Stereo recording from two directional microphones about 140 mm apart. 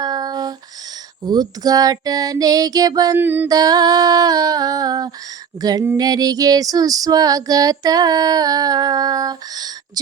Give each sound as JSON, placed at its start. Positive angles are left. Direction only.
{"t": 0.0, "sound": "a sound", "side_deg": -30}
{"t": 1.2, "sound": "female singing", "side_deg": -30}
{"t": 3.2, "sound": "mantra", "side_deg": -15}
{"t": 3.5, "sound": "female singing", "side_deg": -25}